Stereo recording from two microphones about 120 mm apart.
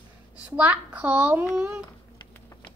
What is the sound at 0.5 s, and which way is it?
A child's voice, 15° right (ahead or behind).